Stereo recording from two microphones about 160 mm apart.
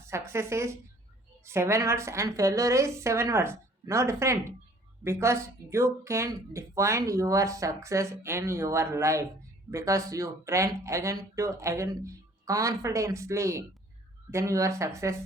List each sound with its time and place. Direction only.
0.1 s speech: 15° right (ahead or behind)